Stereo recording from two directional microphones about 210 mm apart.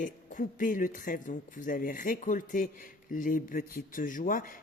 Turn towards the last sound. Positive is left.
turn(degrees=40)  # may be behind; listen again after turning